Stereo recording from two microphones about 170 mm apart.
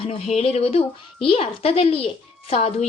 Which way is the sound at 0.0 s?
35° left (ahead or behind).